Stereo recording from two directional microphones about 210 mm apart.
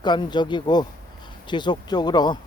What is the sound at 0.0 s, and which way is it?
Speech, 20° left (ahead or behind).